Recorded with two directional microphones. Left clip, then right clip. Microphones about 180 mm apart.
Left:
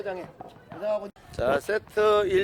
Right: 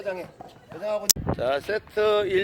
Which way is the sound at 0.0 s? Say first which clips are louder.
Right 2 dB; 55° right (ahead or behind).